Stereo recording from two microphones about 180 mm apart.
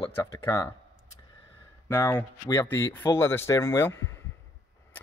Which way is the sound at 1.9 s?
15° left (ahead or behind).